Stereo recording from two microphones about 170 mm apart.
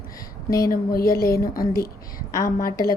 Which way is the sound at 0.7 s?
60° left (ahead or behind).